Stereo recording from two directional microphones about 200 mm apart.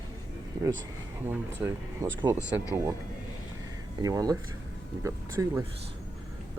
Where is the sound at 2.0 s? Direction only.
15° right (ahead or behind).